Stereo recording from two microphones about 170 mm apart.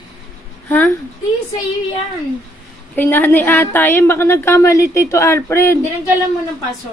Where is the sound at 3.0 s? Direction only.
10° left (ahead or behind).